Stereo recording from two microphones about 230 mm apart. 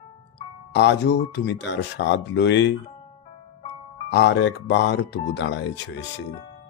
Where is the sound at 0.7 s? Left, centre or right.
Left.